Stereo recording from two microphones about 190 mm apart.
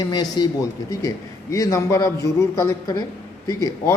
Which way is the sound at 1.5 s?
15° left (ahead or behind).